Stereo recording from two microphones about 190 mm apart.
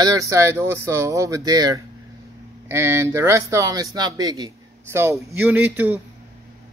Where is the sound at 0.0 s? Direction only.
15° right (ahead or behind).